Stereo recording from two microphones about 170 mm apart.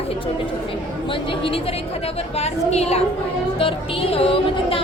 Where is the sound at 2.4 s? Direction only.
40° left (ahead or behind).